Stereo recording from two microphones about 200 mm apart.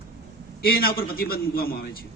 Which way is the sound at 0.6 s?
50° left (ahead or behind).